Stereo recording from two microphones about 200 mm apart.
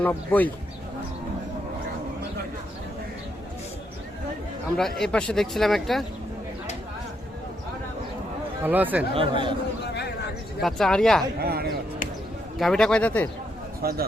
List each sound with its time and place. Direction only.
0.0 s speech: 10° left (ahead or behind)
4.8 s speech: centre (ahead or behind)
8.6 s speech: 10° right (ahead or behind)
9.1 s speech: 25° right (ahead or behind)
9.8 s a sound: 55° left (ahead or behind)
10.6 s speech: centre (ahead or behind)
11.3 s speech: 50° right (ahead or behind)
12.5 s speech: centre (ahead or behind)
13.8 s speech: 50° right (ahead or behind)